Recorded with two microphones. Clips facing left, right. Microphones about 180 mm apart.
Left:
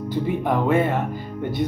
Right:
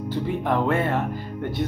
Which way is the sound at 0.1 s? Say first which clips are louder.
Left 2 dB; 15° left (ahead or behind).